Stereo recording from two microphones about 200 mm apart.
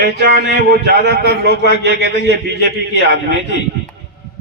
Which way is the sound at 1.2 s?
55° left (ahead or behind).